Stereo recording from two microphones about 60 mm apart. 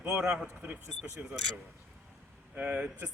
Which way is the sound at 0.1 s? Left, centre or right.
Centre.